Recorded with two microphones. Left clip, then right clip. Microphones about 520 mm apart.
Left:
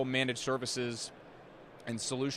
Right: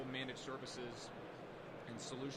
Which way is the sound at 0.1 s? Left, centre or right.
Left.